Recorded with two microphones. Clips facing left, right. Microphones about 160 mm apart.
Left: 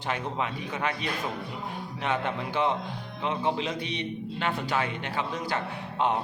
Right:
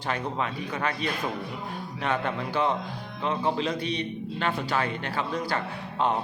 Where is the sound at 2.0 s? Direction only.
20° left (ahead or behind).